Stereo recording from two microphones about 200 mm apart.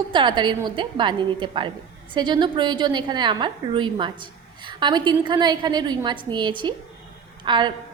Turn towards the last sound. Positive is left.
turn(degrees=-20)  # may be behind; listen again after turning